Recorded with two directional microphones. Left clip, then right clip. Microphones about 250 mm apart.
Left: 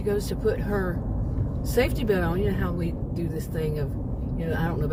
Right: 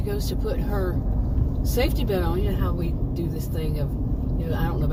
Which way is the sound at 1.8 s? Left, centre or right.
Left.